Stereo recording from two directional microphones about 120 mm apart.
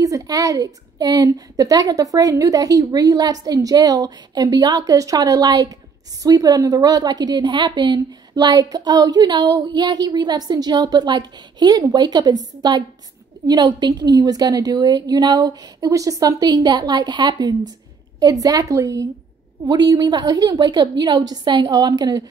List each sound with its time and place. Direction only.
0.0 s a woman's voice: 30° right (ahead or behind)